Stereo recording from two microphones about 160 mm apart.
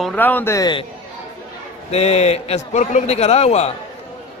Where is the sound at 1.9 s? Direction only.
40° left (ahead or behind).